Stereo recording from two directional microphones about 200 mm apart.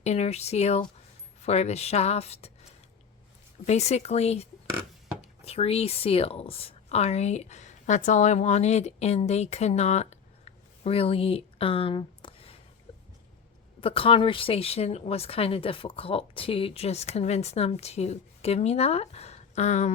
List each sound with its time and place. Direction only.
0.0 s speech: 35° left (ahead or behind)
3.7 s speech: 35° left (ahead or behind)
12.9 s a sound: 30° left (ahead or behind)
13.8 s speech: 25° left (ahead or behind)